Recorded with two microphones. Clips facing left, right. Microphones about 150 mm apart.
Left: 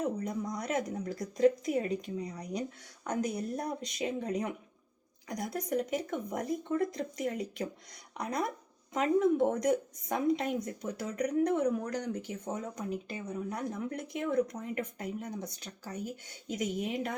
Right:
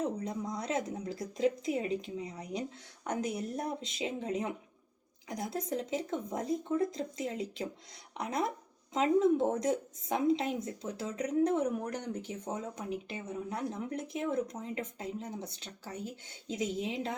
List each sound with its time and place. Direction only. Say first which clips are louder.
0.3 s speech: left 1 dB; 25° right (ahead or behind)